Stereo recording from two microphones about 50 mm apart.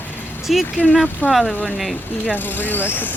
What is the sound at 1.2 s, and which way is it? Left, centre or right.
Speech, left.